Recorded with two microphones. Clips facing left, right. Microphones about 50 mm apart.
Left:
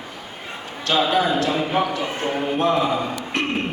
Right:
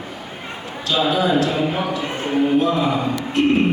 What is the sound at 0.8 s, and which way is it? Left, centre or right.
Speech, left.